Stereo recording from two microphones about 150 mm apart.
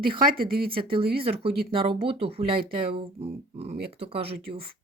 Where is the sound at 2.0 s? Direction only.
40° right (ahead or behind).